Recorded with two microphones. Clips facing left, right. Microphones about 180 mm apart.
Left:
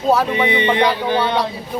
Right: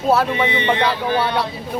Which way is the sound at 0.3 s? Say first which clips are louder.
Left 2 dB; 15° left (ahead or behind).